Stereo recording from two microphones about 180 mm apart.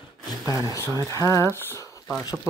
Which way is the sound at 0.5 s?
20° right (ahead or behind).